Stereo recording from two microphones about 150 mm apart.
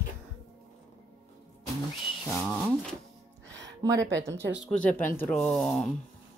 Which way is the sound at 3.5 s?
20° right (ahead or behind).